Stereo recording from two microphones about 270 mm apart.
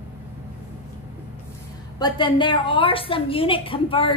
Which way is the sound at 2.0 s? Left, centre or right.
Centre.